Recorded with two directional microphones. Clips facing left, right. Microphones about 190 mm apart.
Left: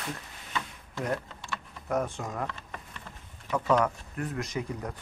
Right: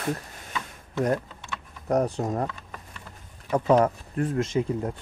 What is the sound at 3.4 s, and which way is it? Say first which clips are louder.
Speech: right 5 dB; 35° right (ahead or behind).